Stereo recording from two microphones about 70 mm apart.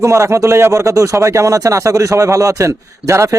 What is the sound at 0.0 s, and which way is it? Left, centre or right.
Speech, right.